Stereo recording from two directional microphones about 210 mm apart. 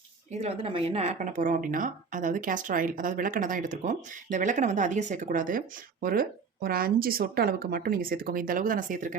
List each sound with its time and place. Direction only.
0.3 s speech: 30° right (ahead or behind)